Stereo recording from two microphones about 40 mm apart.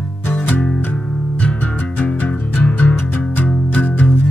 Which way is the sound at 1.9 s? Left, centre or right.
Left.